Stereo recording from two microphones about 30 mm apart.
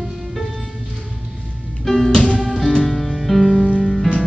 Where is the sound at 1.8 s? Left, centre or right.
Centre.